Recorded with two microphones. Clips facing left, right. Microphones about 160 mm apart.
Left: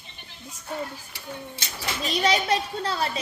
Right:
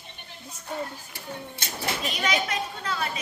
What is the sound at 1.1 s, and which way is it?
Speech, 50° right (ahead or behind).